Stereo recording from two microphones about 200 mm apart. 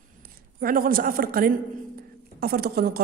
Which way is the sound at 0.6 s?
45° right (ahead or behind).